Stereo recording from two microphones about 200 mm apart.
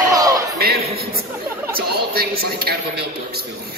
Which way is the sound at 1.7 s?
50° right (ahead or behind).